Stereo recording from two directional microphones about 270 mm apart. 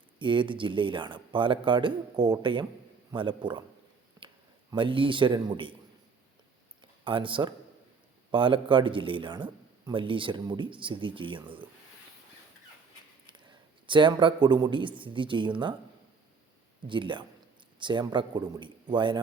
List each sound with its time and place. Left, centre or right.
0.2 s speech: centre
4.7 s speech: centre
7.0 s speech: centre
13.2 s speech: centre
16.8 s speech: centre